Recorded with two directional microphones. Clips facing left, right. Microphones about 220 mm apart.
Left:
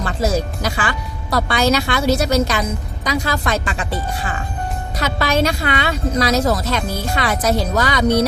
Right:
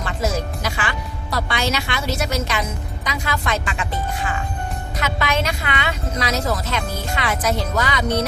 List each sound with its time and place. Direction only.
0.0 s a woman's voice: 35° left (ahead or behind)
4.9 s a woman's voice: 35° left (ahead or behind)